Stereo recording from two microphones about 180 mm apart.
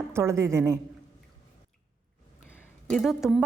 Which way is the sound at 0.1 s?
15° right (ahead or behind).